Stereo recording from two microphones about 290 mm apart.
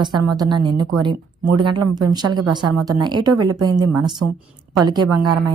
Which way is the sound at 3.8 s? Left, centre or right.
Right.